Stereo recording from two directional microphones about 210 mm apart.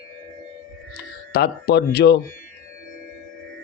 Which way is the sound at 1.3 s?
50° left (ahead or behind).